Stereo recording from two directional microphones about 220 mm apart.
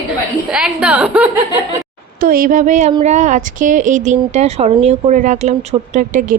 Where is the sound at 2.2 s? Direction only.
40° right (ahead or behind).